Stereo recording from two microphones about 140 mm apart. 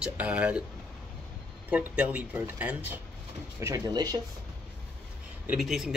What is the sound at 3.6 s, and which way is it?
Speech, 20° right (ahead or behind).